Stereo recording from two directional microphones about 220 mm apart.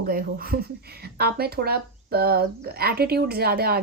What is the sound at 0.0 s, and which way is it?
Speech, 40° right (ahead or behind).